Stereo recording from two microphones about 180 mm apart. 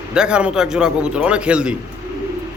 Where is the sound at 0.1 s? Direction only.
5° right (ahead or behind).